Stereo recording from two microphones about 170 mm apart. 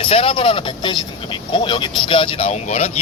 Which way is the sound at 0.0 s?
35° left (ahead or behind).